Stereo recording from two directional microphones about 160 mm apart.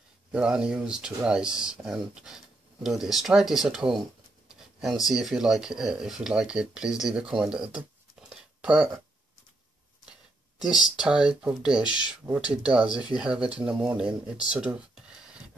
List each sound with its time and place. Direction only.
0.3 s speech: 5° right (ahead or behind)
7.7 s a sound: 5° right (ahead or behind)
11.0 s speech: 5° right (ahead or behind)